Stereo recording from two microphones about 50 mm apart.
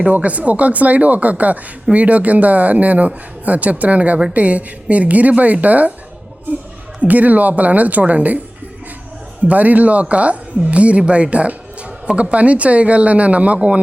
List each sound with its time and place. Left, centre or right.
0.1 s a woman's voice: right
9.5 s a woman's voice: right